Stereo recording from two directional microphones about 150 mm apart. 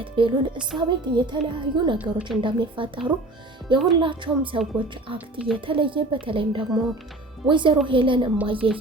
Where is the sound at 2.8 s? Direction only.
35° right (ahead or behind).